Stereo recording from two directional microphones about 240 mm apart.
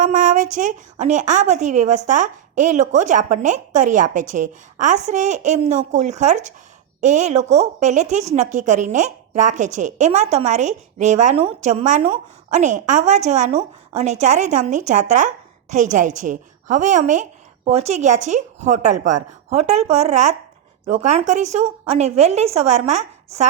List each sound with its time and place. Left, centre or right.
0.0 s a woman's voice: right